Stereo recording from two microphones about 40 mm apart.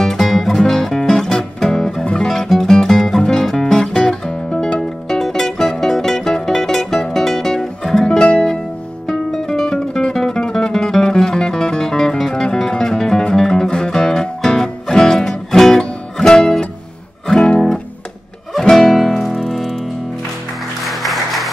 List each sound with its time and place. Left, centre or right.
0.0 s music: centre
9.0 s music: centre
20.8 s music: centre